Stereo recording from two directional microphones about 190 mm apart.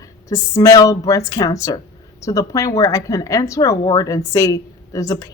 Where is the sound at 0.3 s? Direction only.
20° left (ahead or behind).